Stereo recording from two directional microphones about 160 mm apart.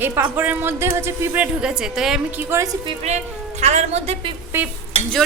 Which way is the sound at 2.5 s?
15° right (ahead or behind).